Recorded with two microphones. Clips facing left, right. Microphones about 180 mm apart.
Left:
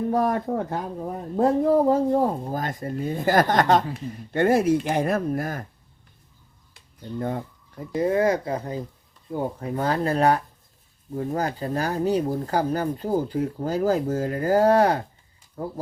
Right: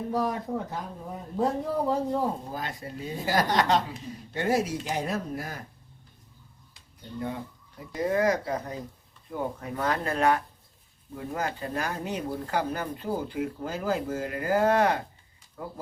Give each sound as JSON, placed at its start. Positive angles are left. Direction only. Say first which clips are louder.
{"t": 0.1, "sound": "speech", "louder": "left 3 dB", "side_deg": 55}
{"t": 6.7, "sound": "a sound", "louder": "left 5 dB", "side_deg": 50}
{"t": 7.9, "sound": "speech", "louder": "left 4 dB", "side_deg": 25}